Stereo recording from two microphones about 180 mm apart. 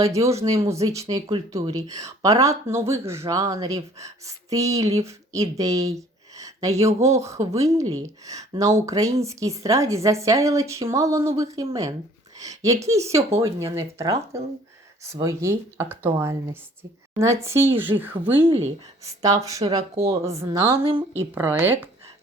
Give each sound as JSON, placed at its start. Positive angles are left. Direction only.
{"t": 0.0, "sound": "speech", "side_deg": -15}
{"t": 21.2, "sound": "speech", "side_deg": -10}